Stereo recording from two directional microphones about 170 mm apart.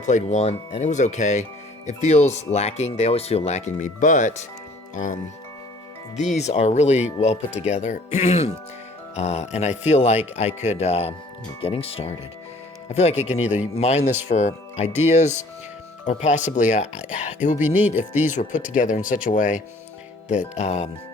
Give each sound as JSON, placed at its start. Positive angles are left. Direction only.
{"t": 0.0, "sound": "speech", "side_deg": 45}
{"t": 13.4, "sound": "a man's voice", "side_deg": -10}
{"t": 13.7, "sound": "speech", "side_deg": 40}
{"t": 18.1, "sound": "a man's voice", "side_deg": -10}
{"t": 18.8, "sound": "speech", "side_deg": 50}
{"t": 20.6, "sound": "speech", "side_deg": 40}